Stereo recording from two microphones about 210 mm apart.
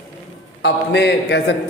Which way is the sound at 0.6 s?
55° left (ahead or behind).